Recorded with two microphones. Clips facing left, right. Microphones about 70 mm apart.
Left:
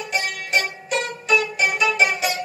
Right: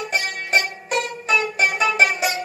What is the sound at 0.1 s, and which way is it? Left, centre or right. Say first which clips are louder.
Music: right 1 dB; right.